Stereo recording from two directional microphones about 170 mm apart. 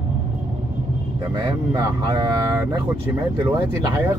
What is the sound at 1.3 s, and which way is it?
Speech, 25° right (ahead or behind).